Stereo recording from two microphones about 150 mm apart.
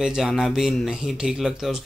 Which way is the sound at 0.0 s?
5° right (ahead or behind).